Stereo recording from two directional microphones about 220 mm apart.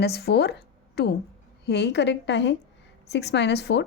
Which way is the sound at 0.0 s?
45° left (ahead or behind).